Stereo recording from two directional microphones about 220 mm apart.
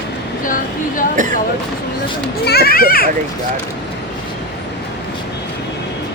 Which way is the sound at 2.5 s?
45° left (ahead or behind).